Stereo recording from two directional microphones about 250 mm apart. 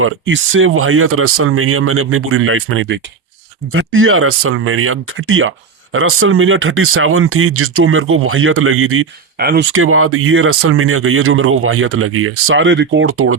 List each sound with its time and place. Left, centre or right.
0.0 s speech: right
9.4 s speech: right
9.7 s speech: right